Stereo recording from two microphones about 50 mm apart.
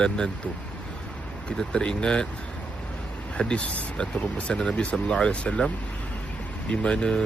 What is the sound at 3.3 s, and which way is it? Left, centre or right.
Speech, left.